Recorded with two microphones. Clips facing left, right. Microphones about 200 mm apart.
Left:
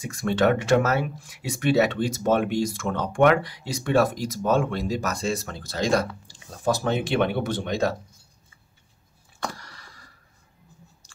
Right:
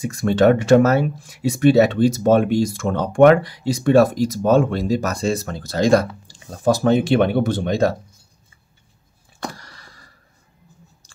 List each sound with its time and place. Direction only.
0.0 s speech: 35° right (ahead or behind)